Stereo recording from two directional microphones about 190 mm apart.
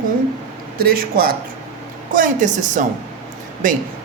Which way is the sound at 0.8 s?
50° right (ahead or behind).